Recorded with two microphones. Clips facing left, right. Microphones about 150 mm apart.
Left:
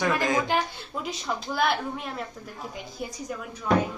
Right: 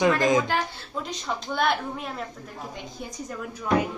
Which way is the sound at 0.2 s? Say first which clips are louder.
Right 4 dB; 20° right (ahead or behind).